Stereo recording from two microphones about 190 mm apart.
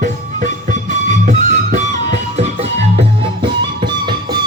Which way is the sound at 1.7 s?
40° right (ahead or behind).